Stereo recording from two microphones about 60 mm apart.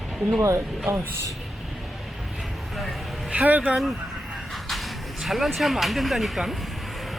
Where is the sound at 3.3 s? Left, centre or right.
Right.